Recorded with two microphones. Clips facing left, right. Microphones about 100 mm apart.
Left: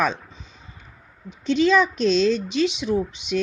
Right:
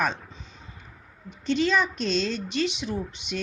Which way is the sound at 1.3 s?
90° left.